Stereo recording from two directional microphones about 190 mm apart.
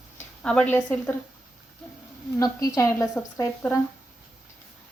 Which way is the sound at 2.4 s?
20° left (ahead or behind).